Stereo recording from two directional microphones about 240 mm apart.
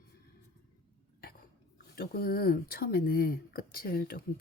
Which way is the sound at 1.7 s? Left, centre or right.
Left.